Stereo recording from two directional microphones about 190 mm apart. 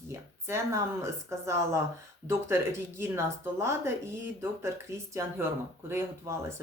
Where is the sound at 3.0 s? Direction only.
15° right (ahead or behind).